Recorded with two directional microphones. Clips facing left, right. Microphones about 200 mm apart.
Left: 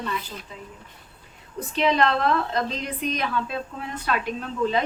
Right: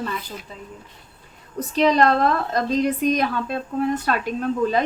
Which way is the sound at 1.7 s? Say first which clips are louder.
Right 4 dB; 40° right (ahead or behind).